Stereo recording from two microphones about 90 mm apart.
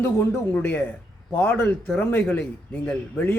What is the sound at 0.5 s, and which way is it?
A man's voice, 20° left (ahead or behind).